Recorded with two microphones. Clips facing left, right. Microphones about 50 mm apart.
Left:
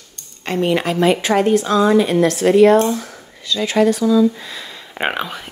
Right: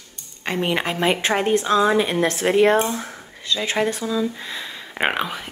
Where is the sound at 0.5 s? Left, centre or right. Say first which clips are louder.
Left 5 dB; centre.